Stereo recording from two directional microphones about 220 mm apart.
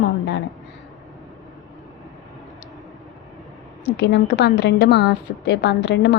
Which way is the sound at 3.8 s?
50° left (ahead or behind).